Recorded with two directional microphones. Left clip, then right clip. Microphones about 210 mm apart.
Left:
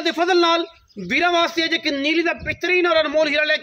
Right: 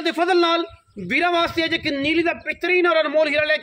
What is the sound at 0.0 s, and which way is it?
A man's voice, 5° right (ahead or behind).